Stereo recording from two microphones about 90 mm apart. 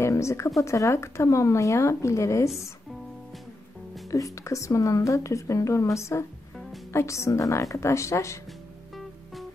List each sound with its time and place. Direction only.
0.0 s a sound: 35° left (ahead or behind)
0.6 s speech: 35° left (ahead or behind)
4.1 s speech: 35° left (ahead or behind)